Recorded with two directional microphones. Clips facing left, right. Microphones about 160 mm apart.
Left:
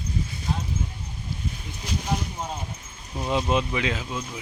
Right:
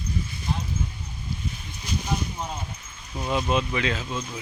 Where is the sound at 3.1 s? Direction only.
15° left (ahead or behind).